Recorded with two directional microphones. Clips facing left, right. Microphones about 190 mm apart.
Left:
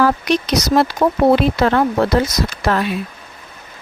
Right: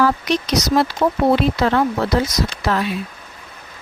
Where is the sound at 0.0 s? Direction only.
60° left (ahead or behind).